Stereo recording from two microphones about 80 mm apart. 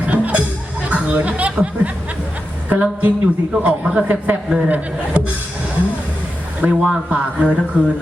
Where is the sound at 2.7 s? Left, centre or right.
Centre.